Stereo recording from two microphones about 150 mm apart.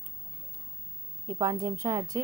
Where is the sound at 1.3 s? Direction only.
25° right (ahead or behind).